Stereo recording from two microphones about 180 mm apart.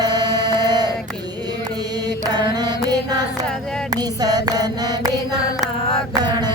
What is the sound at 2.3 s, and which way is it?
Mantra, 25° right (ahead or behind).